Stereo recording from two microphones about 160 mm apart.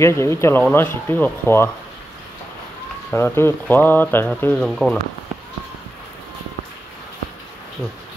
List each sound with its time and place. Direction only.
0.0 s speech: 15° left (ahead or behind)
3.1 s speech: 15° left (ahead or behind)